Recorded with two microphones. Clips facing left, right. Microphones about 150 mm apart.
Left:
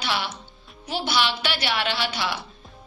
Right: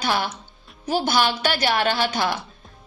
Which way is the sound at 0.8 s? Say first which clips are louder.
Right 4 dB; 45° right (ahead or behind).